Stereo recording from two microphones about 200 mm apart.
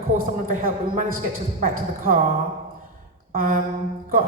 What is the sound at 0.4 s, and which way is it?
A man's voice, 45° right (ahead or behind).